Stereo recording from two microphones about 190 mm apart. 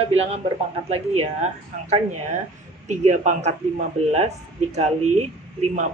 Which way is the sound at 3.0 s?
35° right (ahead or behind).